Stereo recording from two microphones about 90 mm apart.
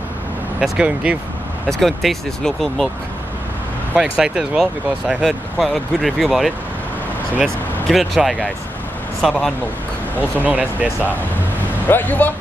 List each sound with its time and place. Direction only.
0.6 s speech: 10° right (ahead or behind)
1.7 s speech: centre (ahead or behind)
4.0 s speech: 5° right (ahead or behind)
7.9 s speech: centre (ahead or behind)
10.1 s speech: 20° right (ahead or behind)
11.9 s speech: 20° left (ahead or behind)